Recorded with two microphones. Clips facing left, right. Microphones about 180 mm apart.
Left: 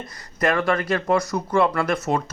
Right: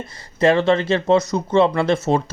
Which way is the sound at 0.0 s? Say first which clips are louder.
Right 6 dB; 25° right (ahead or behind).